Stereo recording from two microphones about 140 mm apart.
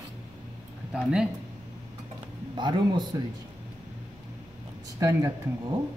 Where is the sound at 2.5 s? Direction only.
35° right (ahead or behind).